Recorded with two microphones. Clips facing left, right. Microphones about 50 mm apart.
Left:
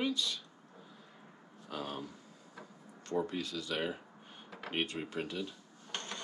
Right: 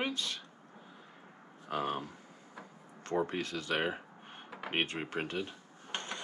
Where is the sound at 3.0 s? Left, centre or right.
Right.